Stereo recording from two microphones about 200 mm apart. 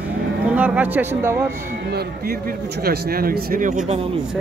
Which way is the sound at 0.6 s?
10° right (ahead or behind).